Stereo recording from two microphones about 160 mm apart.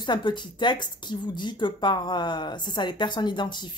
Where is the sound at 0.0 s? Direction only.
30° left (ahead or behind).